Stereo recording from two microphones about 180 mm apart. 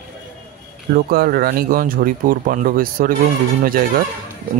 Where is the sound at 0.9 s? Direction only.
55° right (ahead or behind).